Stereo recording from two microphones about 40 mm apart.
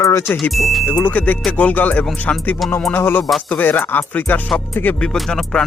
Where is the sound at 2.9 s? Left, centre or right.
Left.